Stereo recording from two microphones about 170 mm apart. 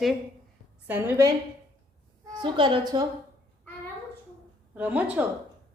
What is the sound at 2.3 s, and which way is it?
Speech, 30° right (ahead or behind).